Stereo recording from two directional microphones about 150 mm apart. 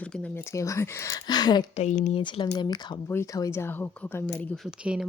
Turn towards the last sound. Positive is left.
turn(degrees=-5)  # may be behind; listen again after turning